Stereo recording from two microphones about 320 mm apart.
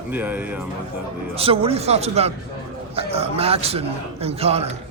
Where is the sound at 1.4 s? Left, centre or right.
Centre.